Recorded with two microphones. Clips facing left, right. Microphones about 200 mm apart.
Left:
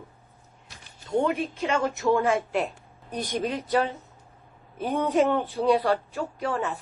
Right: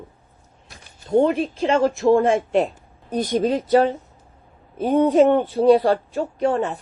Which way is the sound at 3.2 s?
40° right (ahead or behind).